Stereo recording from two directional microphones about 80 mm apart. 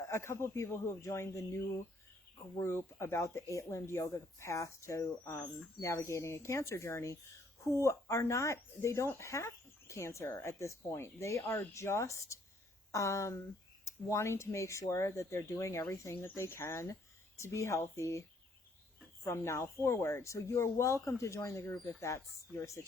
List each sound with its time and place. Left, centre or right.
0.1 s speech: left